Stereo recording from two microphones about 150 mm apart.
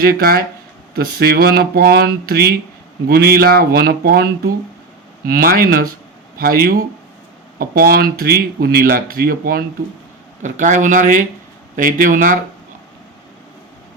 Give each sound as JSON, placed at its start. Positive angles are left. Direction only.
{"t": 0.0, "sound": "speech", "side_deg": -85}
{"t": 5.2, "sound": "speech", "side_deg": -80}
{"t": 10.4, "sound": "speech", "side_deg": -60}